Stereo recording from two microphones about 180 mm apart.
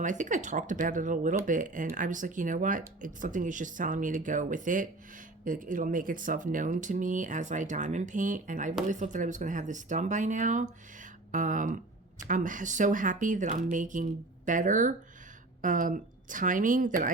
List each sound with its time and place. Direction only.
0.0 s speech: 45° right (ahead or behind)